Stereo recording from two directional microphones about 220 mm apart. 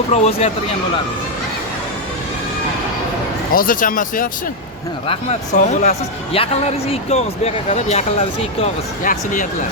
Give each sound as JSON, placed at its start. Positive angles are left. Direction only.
{"t": 0.1, "sound": "speech", "side_deg": 25}
{"t": 3.5, "sound": "speech", "side_deg": 40}